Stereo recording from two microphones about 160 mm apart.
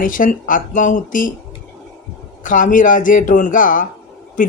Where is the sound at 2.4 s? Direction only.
55° left (ahead or behind).